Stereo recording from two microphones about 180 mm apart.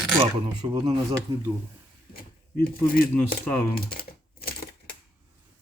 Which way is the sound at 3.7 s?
55° left (ahead or behind).